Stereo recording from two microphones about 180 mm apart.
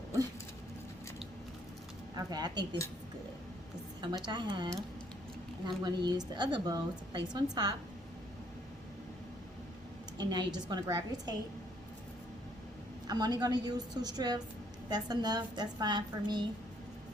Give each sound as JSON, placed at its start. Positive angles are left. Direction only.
{"t": 2.1, "sound": "a woman's voice", "side_deg": -20}
{"t": 4.3, "sound": "a woman's voice", "side_deg": -25}
{"t": 10.2, "sound": "a woman's voice", "side_deg": -25}
{"t": 13.1, "sound": "a woman's voice", "side_deg": -20}